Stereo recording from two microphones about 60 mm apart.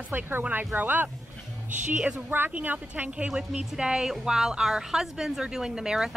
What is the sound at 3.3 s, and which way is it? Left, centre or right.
Speech, centre.